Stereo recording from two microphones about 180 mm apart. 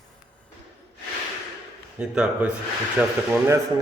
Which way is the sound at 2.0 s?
5° right (ahead or behind).